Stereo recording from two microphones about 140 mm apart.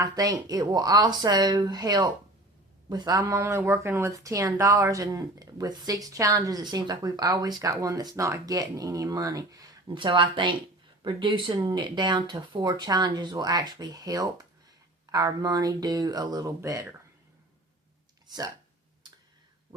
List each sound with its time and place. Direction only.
0.0 s speech: 25° right (ahead or behind)
18.3 s speech: 30° right (ahead or behind)